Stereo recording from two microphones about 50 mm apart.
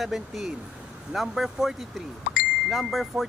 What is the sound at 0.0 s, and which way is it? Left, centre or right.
Speech, centre.